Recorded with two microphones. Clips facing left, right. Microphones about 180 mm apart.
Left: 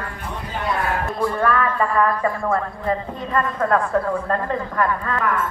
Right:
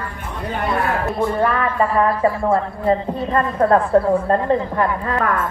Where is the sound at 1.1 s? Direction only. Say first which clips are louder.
Even; 25° right (ahead or behind).